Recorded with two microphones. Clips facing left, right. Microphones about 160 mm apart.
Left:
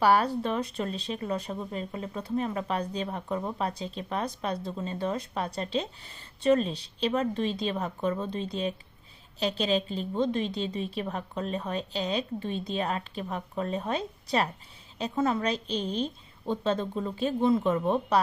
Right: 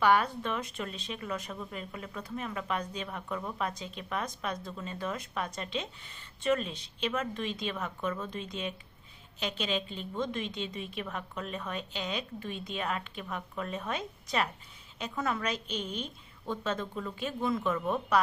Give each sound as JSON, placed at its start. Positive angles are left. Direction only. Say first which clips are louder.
{"t": 0.0, "sound": "speech", "louder": "left 3 dB", "side_deg": 35}